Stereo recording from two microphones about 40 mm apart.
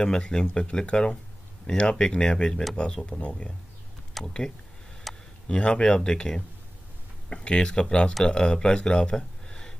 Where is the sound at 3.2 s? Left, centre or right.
Left.